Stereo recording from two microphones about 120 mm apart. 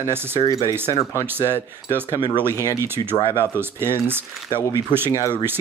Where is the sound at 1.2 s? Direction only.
20° right (ahead or behind).